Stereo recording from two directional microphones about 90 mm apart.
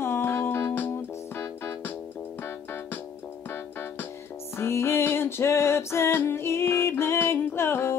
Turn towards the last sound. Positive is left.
turn(degrees=25)  # may be behind; listen again after turning